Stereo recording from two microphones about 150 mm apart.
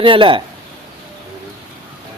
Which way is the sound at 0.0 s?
35° right (ahead or behind).